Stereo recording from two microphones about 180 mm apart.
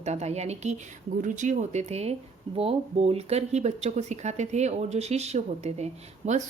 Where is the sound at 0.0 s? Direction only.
35° right (ahead or behind).